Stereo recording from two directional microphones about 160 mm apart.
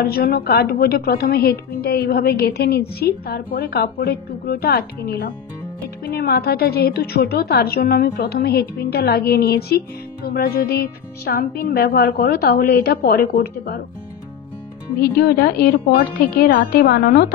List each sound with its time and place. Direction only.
0.0 s a woman's voice: 75° left (ahead or behind)
15.1 s a woman's voice: 75° left (ahead or behind)